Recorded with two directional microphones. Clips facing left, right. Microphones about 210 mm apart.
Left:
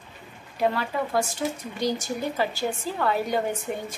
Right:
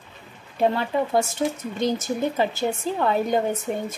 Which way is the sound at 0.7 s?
25° right (ahead or behind).